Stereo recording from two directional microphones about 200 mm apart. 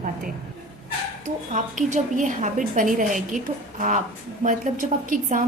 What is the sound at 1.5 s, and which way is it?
A woman's voice, 40° right (ahead or behind).